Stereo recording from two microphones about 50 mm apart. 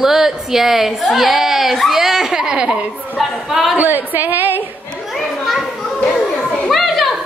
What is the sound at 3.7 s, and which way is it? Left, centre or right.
Speech, right.